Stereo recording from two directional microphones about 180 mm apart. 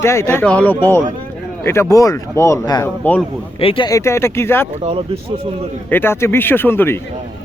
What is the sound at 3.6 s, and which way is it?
Speech, 30° left (ahead or behind).